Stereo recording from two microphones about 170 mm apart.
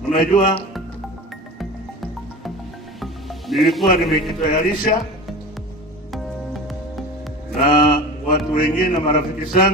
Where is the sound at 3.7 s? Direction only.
Centre (ahead or behind).